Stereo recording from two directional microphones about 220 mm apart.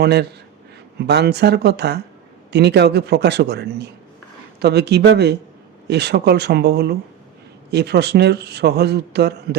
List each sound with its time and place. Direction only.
0.0 s speech: 50° right (ahead or behind)